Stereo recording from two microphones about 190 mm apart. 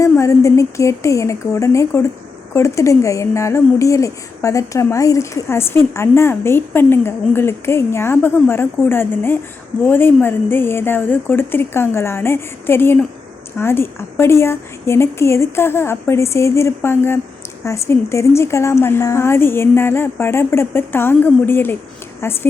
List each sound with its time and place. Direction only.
0.0 s speech: 15° left (ahead or behind)